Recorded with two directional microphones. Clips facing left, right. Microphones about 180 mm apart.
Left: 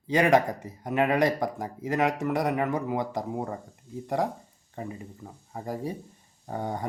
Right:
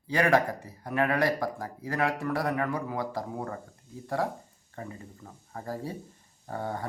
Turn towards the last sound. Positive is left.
turn(degrees=15)  # may be behind; listen again after turning